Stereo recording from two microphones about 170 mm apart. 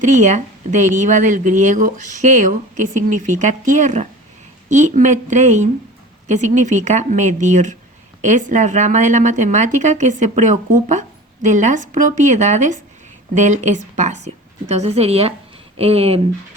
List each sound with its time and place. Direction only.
0.0 s speech: 45° right (ahead or behind)